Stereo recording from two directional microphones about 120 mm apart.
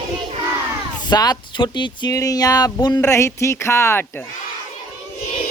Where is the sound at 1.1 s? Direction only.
35° left (ahead or behind).